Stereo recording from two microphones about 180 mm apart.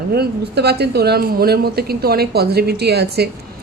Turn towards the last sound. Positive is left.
turn(degrees=-65)  # may be behind; listen again after turning